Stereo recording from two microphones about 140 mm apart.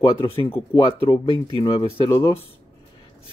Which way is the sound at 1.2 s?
30° left (ahead or behind).